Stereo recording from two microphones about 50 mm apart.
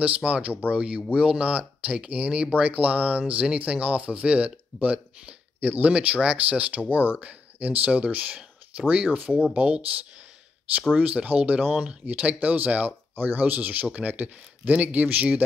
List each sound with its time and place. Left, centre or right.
0.0 s speech: right
11.0 s speech: right